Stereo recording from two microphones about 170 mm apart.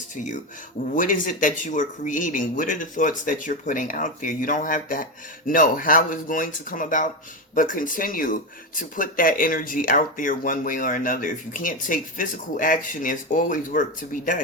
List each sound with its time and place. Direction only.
0.9 s speech: 50° left (ahead or behind)